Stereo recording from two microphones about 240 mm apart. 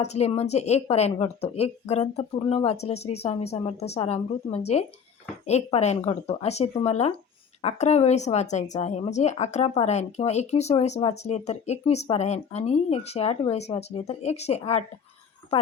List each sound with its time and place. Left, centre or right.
0.0 s speech: left